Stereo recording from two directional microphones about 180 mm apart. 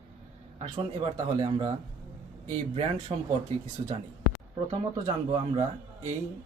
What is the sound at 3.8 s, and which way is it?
Speech, 35° right (ahead or behind).